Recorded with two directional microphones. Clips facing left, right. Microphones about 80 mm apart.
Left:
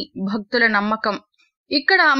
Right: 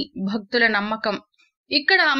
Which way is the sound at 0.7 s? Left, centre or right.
Centre.